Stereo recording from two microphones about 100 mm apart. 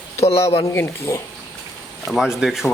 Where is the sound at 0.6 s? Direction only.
25° left (ahead or behind).